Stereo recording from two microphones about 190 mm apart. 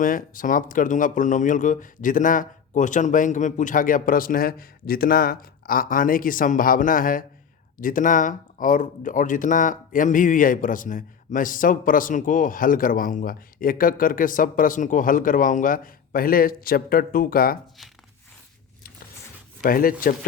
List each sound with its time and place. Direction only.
0.0 s speech: 45° left (ahead or behind)
19.6 s speech: 50° left (ahead or behind)